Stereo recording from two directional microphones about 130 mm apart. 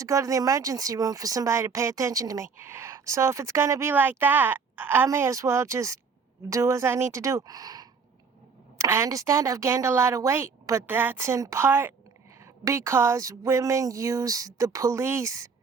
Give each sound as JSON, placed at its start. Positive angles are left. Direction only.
{"t": 0.0, "sound": "speech", "side_deg": -25}